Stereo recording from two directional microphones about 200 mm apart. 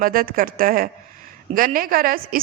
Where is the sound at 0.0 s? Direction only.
45° right (ahead or behind).